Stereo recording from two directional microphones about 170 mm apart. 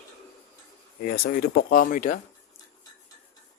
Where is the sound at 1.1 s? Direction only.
55° left (ahead or behind).